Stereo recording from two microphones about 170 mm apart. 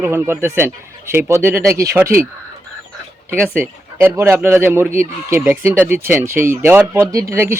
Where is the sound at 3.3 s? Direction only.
10° right (ahead or behind).